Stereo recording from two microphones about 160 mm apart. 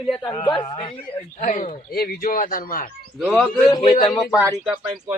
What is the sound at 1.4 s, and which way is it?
Speech, 55° left (ahead or behind).